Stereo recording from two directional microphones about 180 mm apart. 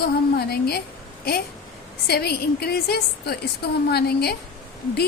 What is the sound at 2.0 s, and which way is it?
A woman's voice, 60° left (ahead or behind).